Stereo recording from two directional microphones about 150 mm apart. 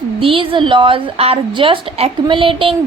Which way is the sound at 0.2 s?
35° right (ahead or behind).